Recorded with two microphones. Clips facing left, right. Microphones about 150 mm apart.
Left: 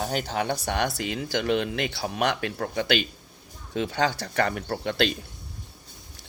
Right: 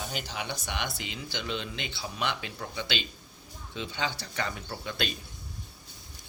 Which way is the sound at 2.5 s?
60° left (ahead or behind).